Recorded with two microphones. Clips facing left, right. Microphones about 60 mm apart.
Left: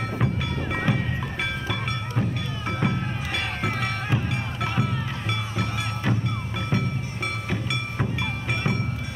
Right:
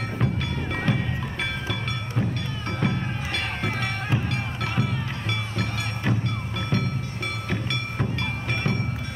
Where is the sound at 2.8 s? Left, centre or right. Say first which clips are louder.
Right 1 dB; centre.